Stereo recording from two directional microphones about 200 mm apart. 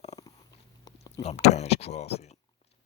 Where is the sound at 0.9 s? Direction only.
20° left (ahead or behind).